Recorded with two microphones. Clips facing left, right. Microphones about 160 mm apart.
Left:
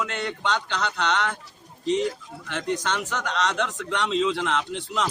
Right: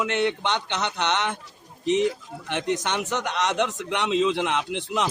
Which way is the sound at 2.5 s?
20° right (ahead or behind).